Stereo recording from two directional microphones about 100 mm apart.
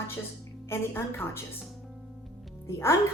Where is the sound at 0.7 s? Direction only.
25° left (ahead or behind).